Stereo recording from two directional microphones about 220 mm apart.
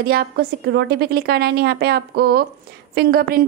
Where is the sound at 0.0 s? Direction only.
45° right (ahead or behind).